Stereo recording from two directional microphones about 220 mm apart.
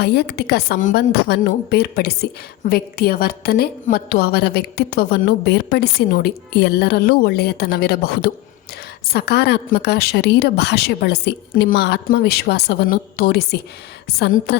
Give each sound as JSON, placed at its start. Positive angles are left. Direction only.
{"t": 0.0, "sound": "a woman's voice", "side_deg": 50}